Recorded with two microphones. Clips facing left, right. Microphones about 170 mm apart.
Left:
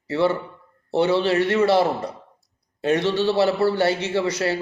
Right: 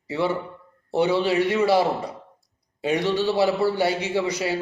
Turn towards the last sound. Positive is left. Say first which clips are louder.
# left 2 dB
turn(degrees=-10)  # may be behind; listen again after turning